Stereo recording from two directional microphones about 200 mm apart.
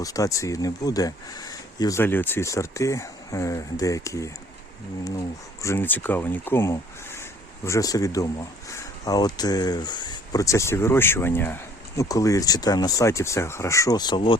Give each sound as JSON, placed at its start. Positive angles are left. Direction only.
{"t": 0.0, "sound": "speech", "side_deg": 15}
{"t": 5.6, "sound": "speech", "side_deg": 10}